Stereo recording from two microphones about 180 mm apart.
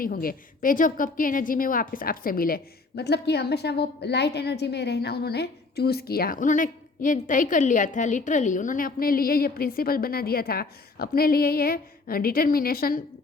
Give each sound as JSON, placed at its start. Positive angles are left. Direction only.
{"t": 0.0, "sound": "a woman's voice", "side_deg": 55}